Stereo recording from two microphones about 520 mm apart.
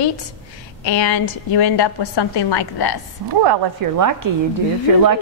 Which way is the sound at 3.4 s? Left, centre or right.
Right.